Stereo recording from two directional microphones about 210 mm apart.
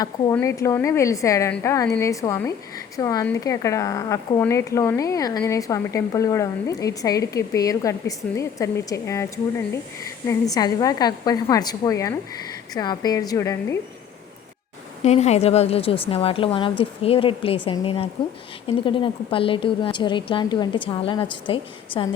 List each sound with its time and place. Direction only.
0.0 s a woman's voice: 15° left (ahead or behind)
10.5 s a woman's voice: 20° left (ahead or behind)
15.0 s a woman's voice: 30° left (ahead or behind)